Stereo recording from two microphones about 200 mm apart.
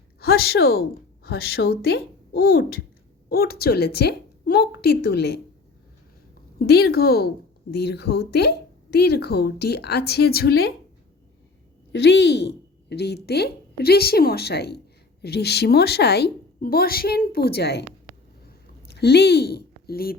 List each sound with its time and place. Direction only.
0.2 s a woman's voice: 50° left (ahead or behind)
6.6 s a woman's voice: 50° left (ahead or behind)
11.9 s a woman's voice: 60° left (ahead or behind)
18.9 s speech: 55° left (ahead or behind)